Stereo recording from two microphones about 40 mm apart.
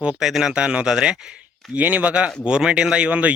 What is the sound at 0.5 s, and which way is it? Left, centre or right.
Speech, right.